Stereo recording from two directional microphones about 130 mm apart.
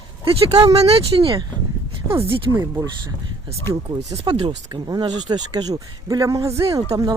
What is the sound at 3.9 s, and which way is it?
Speech, 45° right (ahead or behind).